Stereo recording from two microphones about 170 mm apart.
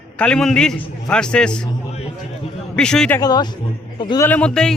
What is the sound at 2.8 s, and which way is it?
Speech, 5° left (ahead or behind).